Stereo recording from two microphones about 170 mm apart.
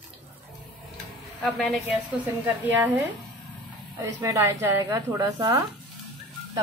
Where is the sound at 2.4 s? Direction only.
10° right (ahead or behind).